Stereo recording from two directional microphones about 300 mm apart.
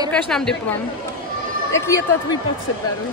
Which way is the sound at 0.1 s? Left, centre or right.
Centre.